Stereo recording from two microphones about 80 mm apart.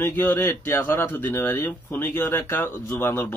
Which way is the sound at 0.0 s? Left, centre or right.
Left.